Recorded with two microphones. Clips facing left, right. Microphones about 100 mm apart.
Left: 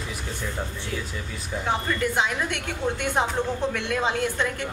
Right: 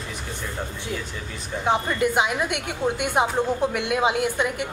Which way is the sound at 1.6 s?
20° right (ahead or behind).